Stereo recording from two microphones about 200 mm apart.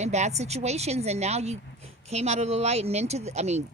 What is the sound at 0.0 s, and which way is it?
Speech, 35° right (ahead or behind).